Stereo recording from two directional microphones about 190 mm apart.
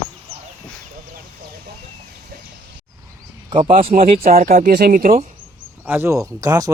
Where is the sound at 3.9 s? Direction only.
50° right (ahead or behind).